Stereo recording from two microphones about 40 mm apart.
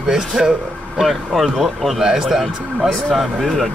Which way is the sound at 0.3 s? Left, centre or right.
Centre.